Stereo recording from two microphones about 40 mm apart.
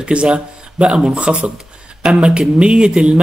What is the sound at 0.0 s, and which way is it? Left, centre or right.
Speech, right.